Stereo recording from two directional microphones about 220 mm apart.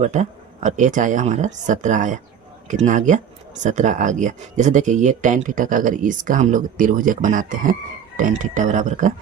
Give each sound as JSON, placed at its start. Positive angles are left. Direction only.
{"t": 0.0, "sound": "speech", "side_deg": -30}